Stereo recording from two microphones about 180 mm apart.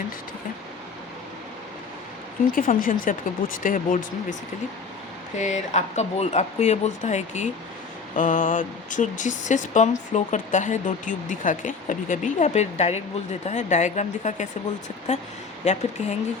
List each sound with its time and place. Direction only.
2.5 s speech: 50° left (ahead or behind)
5.4 s speech: 40° left (ahead or behind)